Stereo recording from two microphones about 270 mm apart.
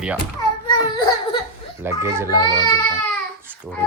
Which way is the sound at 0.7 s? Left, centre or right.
Centre.